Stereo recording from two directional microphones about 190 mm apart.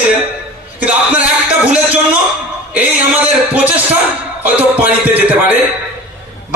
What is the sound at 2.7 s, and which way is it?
A man's voice, 10° right (ahead or behind).